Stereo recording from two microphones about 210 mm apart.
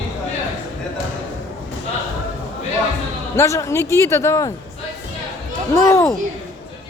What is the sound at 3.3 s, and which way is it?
A man's voice, 15° left (ahead or behind).